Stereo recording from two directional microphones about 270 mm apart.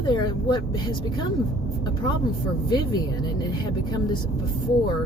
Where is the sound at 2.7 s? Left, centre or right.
Centre.